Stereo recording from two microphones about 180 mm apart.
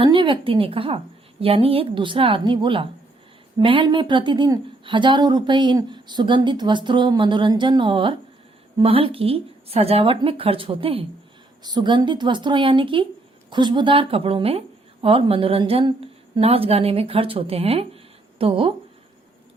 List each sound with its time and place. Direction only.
0.0 s a woman's voice: 30° right (ahead or behind)